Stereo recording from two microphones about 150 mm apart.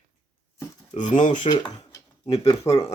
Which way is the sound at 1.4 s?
30° left (ahead or behind).